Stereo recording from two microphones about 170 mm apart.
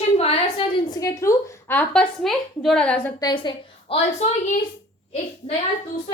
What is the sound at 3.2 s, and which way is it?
A woman's voice, 30° left (ahead or behind).